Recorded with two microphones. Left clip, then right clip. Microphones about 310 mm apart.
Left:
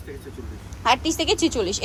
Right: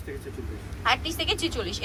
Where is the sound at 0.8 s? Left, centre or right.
Centre.